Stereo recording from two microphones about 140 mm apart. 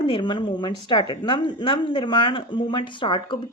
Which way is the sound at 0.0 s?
35° left (ahead or behind).